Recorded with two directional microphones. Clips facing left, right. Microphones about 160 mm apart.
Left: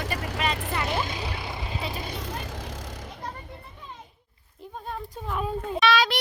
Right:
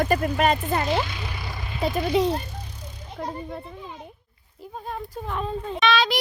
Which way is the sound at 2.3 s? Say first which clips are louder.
Right 1 dB; 90° left.